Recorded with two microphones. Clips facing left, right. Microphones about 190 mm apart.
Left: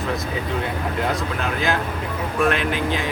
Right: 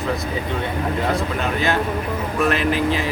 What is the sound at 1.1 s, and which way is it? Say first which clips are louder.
Speech: right 3 dB; centre (ahead or behind).